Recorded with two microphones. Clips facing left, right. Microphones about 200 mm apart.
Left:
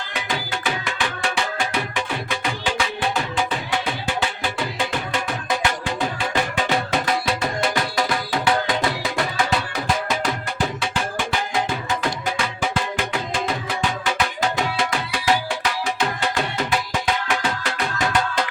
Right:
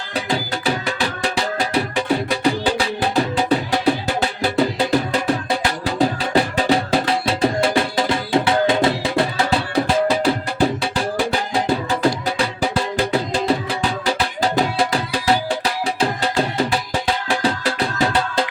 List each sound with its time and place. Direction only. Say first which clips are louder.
0.1 s music: right 6 dB; 35° right (ahead or behind)